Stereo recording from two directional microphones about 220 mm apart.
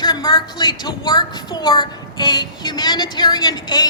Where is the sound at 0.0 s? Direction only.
20° left (ahead or behind).